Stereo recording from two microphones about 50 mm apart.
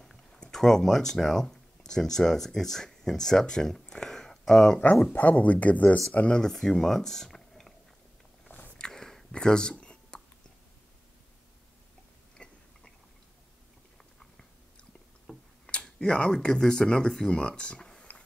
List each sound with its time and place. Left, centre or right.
0.0 s speech: centre
5.1 s speech: left
6.1 s speech: centre
8.5 s walk: left
8.7 s a sound: centre
12.4 s biting: centre
15.3 s a sound: centre
15.8 s speech: centre